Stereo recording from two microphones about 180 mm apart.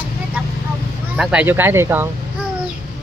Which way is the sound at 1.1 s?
5° right (ahead or behind).